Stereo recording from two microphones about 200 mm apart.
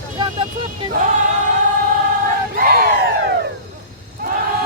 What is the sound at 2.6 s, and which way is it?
Crowd, 45° right (ahead or behind).